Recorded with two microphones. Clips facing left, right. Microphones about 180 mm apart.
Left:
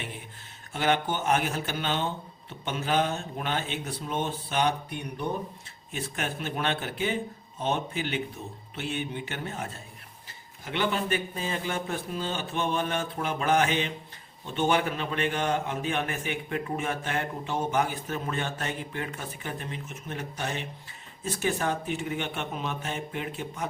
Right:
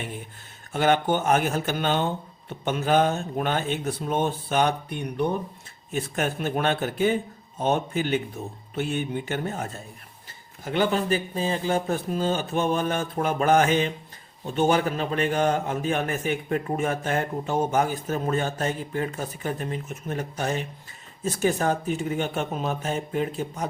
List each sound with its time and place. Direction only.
0.7 s a man's voice: 50° right (ahead or behind)